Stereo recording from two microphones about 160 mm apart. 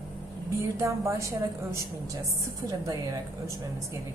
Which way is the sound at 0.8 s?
20° right (ahead or behind).